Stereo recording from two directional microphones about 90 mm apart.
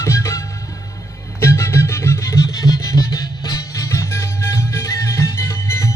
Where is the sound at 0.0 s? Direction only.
35° left (ahead or behind).